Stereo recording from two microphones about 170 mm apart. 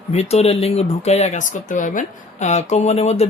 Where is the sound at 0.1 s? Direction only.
40° left (ahead or behind).